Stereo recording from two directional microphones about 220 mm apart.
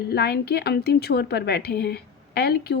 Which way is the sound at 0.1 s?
45° left (ahead or behind).